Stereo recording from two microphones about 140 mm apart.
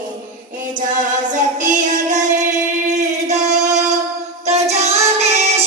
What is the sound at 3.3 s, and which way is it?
Singing, 55° right (ahead or behind).